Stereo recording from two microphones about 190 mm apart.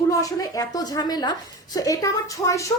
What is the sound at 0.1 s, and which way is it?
A woman's voice, 20° left (ahead or behind).